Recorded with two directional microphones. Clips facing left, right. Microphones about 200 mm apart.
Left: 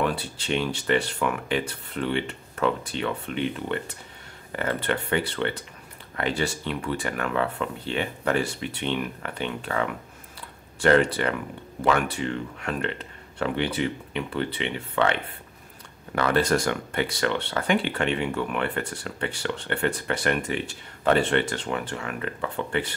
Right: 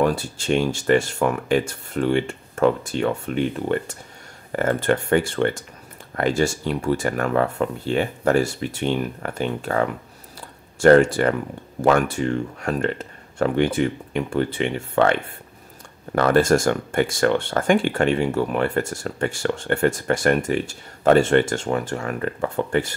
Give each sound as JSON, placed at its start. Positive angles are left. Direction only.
{"t": 0.0, "sound": "speech", "side_deg": -45}
{"t": 16.2, "sound": "speech", "side_deg": -45}